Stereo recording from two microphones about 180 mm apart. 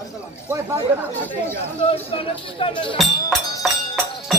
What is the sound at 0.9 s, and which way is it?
Speech, 10° right (ahead or behind).